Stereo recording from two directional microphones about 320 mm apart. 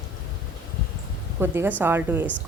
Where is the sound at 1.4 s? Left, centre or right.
Centre.